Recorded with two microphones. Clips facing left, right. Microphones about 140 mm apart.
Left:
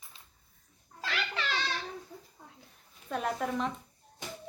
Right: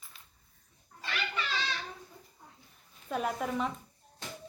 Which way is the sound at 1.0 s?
90° left.